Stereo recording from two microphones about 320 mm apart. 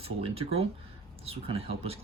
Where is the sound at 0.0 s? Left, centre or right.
Centre.